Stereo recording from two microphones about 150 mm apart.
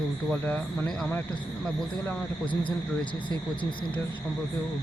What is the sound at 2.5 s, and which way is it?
Speech, 35° left (ahead or behind).